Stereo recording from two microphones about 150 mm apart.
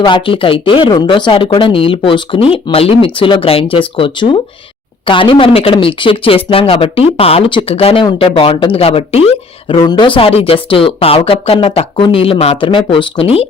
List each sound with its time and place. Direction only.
0.0 s speech: 35° left (ahead or behind)
9.7 s speech: 30° left (ahead or behind)